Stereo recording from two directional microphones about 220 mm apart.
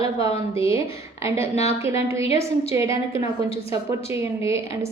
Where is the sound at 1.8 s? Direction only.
15° right (ahead or behind).